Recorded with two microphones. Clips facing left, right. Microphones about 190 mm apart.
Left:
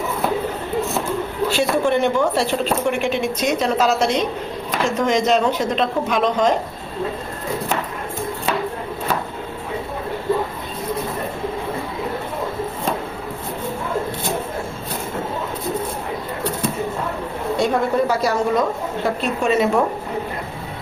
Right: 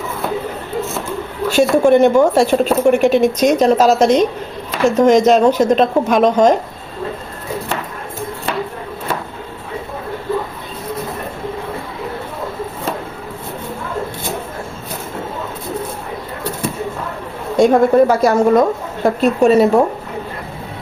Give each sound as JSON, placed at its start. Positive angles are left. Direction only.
{"t": 1.5, "sound": "a woman's voice", "side_deg": -45}
{"t": 17.6, "sound": "a woman's voice", "side_deg": -50}
{"t": 19.2, "sound": "a woman's voice", "side_deg": -40}